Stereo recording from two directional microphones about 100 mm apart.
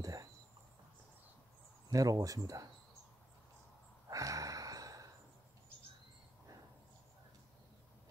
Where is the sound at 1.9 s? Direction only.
35° right (ahead or behind).